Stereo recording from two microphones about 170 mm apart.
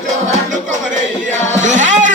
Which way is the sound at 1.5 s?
45° right (ahead or behind).